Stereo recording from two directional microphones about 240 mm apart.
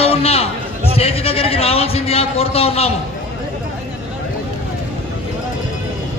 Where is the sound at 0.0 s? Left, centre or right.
Left.